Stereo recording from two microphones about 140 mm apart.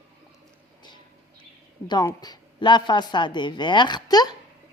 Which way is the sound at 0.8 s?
35° left (ahead or behind).